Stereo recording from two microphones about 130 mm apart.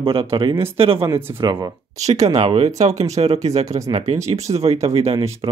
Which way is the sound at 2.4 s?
50° right (ahead or behind).